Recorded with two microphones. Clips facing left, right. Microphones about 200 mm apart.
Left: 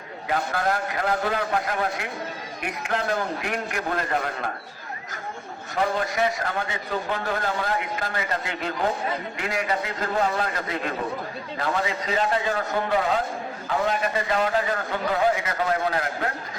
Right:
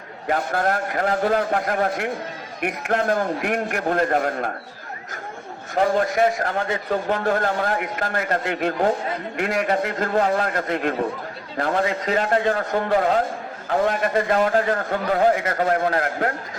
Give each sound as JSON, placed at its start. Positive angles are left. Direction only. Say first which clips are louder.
{"t": 0.3, "sound": "a man's voice", "louder": "right 3 dB", "side_deg": -55}
{"t": 5.7, "sound": "a man's voice", "louder": "right 5 dB", "side_deg": -50}